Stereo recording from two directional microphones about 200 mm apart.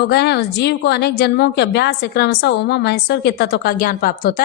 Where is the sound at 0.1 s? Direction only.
55° left (ahead or behind).